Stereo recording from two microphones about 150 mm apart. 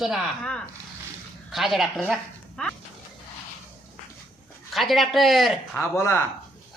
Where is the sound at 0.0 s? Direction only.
Centre (ahead or behind).